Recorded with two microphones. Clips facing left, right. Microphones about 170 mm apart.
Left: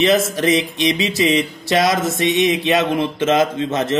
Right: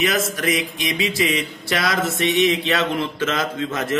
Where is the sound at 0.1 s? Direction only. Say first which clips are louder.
Left 6 dB; 25° left (ahead or behind).